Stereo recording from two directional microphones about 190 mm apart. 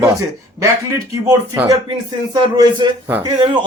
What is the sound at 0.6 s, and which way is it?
A man's voice, 15° right (ahead or behind).